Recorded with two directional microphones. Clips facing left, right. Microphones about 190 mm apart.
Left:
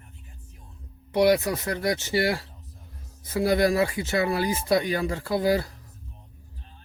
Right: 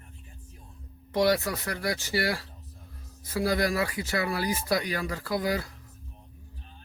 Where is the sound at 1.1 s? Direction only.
15° left (ahead or behind).